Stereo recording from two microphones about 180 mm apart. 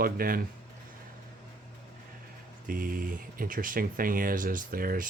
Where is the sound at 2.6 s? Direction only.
50° right (ahead or behind).